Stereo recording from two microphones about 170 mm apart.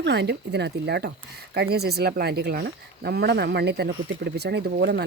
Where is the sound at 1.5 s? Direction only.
70° right (ahead or behind).